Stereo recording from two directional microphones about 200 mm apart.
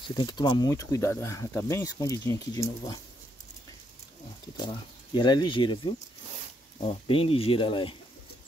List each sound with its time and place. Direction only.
0.1 s speech: 20° left (ahead or behind)
4.6 s speech: 20° left (ahead or behind)